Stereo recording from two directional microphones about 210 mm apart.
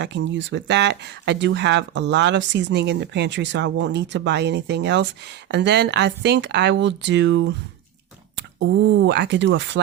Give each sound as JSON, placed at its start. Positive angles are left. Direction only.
{"t": 0.0, "sound": "speech", "side_deg": -55}